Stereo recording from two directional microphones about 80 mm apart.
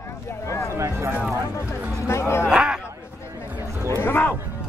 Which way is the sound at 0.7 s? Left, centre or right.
Right.